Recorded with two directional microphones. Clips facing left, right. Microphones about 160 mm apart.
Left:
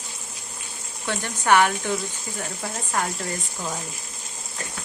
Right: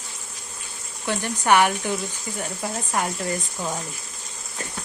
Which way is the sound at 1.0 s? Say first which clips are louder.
Right 2 dB; 15° right (ahead or behind).